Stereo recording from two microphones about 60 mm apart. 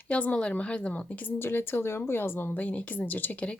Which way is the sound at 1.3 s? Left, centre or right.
Left.